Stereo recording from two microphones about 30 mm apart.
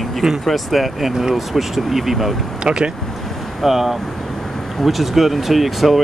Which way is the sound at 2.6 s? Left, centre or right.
Right.